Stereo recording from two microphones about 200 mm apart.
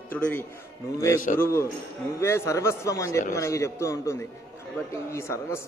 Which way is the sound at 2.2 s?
15° left (ahead or behind).